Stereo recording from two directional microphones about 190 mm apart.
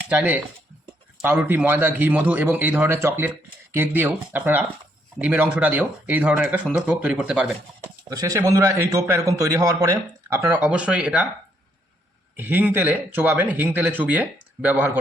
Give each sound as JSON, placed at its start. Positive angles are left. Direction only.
{"t": 0.1, "sound": "a man's voice", "side_deg": -5}
{"t": 8.1, "sound": "a man's voice", "side_deg": -20}
{"t": 12.4, "sound": "a man's voice", "side_deg": -10}